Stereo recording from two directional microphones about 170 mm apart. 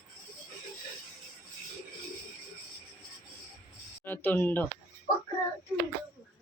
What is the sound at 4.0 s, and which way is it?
Speech, 10° left (ahead or behind).